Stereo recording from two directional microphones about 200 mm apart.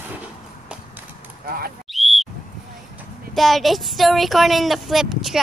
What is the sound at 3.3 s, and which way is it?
Speech, centre (ahead or behind).